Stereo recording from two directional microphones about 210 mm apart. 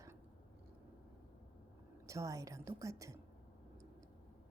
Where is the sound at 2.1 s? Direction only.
15° right (ahead or behind).